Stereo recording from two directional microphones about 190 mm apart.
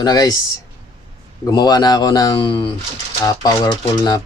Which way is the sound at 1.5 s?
20° left (ahead or behind).